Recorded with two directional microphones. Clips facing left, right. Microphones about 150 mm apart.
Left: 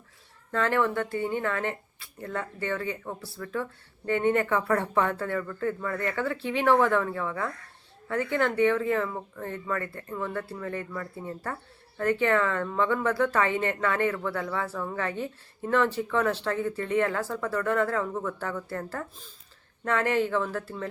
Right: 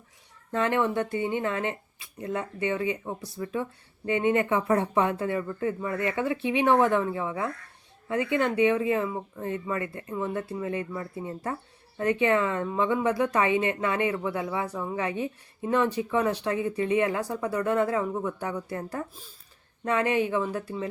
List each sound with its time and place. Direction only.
0.5 s speech: 20° right (ahead or behind)